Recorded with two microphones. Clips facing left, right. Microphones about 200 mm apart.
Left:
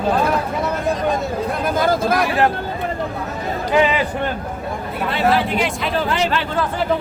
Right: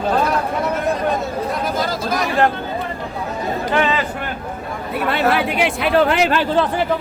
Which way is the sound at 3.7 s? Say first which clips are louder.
Left 3 dB; 10° left (ahead or behind).